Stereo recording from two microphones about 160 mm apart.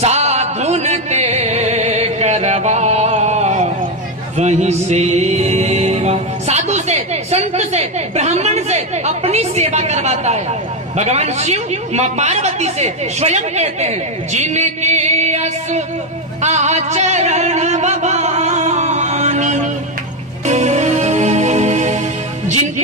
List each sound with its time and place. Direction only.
0.0 s music: 45° right (ahead or behind)
11.0 s a woman's voice: 45° right (ahead or behind)
16.4 s music: 45° right (ahead or behind)